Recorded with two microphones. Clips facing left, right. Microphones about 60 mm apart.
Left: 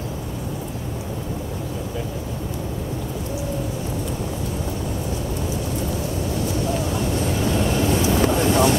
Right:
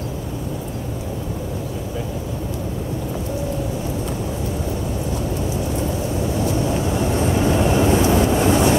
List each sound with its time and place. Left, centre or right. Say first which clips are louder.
6.7 s vehicle: right 3 dB; centre